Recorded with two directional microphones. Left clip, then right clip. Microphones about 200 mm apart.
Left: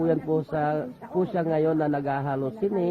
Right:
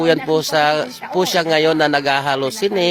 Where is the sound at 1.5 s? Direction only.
15° right (ahead or behind).